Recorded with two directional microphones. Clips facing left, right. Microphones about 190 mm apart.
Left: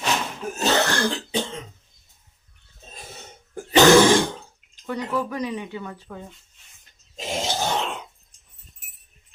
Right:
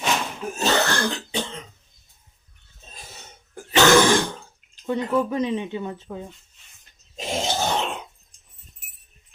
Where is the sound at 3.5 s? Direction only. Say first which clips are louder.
Left 3 dB; 40° left (ahead or behind).